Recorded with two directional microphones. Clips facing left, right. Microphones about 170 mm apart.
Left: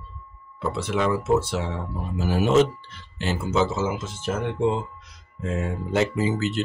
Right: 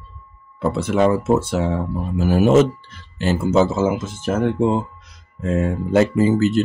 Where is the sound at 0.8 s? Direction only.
45° right (ahead or behind).